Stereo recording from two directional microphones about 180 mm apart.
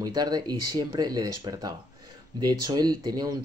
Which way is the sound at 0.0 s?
20° right (ahead or behind).